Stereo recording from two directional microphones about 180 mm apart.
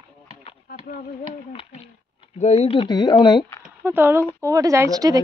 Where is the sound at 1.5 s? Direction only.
35° left (ahead or behind).